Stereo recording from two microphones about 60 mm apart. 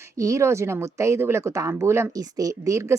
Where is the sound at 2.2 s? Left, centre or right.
Right.